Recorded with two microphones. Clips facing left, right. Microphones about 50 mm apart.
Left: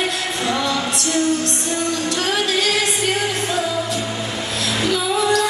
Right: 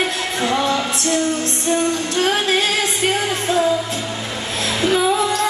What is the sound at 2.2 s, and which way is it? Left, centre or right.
Music, right.